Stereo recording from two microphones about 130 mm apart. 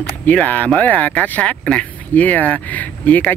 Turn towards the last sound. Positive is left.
turn(degrees=10)  # may be behind; listen again after turning